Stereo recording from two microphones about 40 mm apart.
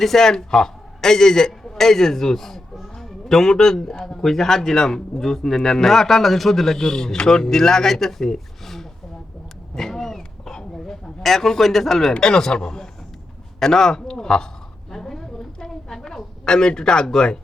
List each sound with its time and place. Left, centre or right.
0.0 s a man's voice: centre
9.7 s a sound: centre
11.2 s speech: centre
12.1 s a man's voice: centre
13.6 s a man's voice: centre
14.8 s a sound: centre